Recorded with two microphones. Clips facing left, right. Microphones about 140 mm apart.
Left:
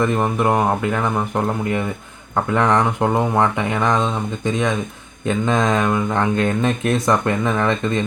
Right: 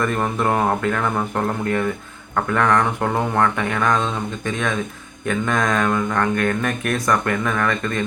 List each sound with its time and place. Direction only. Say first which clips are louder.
0.0 s speech: left 3 dB; 15° left (ahead or behind)